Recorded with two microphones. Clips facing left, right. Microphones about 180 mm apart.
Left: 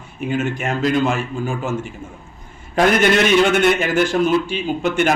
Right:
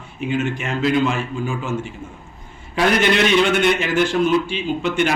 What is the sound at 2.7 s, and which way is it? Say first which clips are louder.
A man's voice: left 2 dB; 45° left (ahead or behind).